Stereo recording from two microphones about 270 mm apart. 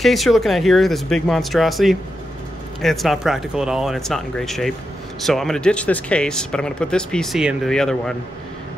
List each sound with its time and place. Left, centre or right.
0.0 s speech: centre